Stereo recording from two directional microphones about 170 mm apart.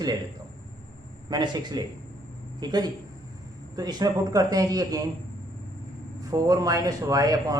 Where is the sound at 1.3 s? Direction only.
25° right (ahead or behind).